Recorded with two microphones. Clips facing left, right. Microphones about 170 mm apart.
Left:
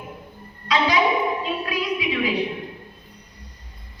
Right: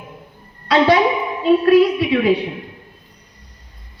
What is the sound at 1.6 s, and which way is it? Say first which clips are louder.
Speech: right 13 dB; 60° right (ahead or behind).